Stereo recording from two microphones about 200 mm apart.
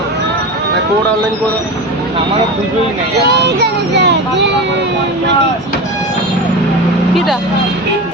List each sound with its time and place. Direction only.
3.2 s speech: 55° right (ahead or behind)